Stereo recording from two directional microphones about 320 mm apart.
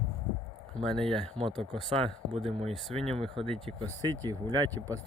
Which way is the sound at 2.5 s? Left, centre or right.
Centre.